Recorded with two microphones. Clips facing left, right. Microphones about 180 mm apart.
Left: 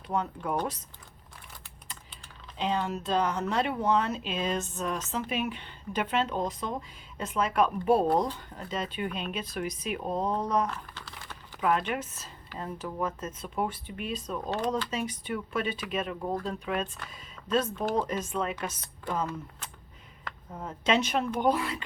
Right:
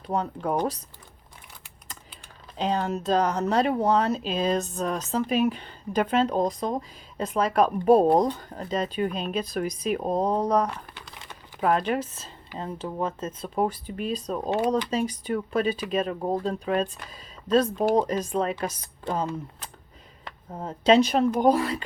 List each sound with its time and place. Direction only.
0.1 s speech: 35° right (ahead or behind)
2.6 s speech: 40° right (ahead or behind)
10.7 s crumpling: 15° right (ahead or behind)
11.6 s speech: 35° right (ahead or behind)